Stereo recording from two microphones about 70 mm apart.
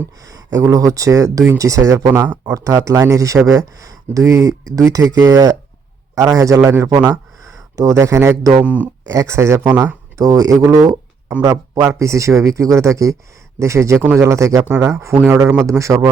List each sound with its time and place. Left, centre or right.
0.2 s speech: right
6.7 s speech: right
8.6 s speech: right
9.0 s speech: right
11.4 s speech: right